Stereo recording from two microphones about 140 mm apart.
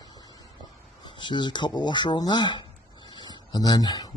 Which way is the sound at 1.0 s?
35° left (ahead or behind).